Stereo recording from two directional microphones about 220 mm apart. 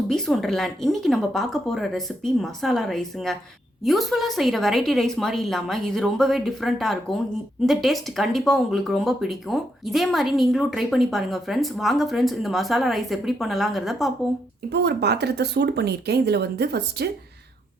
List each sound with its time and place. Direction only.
0.1 s speech: centre (ahead or behind)
14.7 s speech: 50° right (ahead or behind)